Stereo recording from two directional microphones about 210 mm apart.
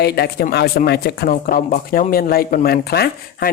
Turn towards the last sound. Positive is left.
turn(degrees=45)  # may be behind; listen again after turning